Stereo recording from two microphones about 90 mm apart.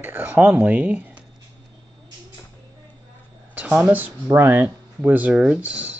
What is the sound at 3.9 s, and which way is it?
Speech, 25° right (ahead or behind).